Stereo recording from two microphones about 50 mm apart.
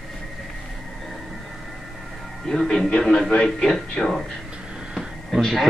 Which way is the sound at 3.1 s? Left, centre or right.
Centre.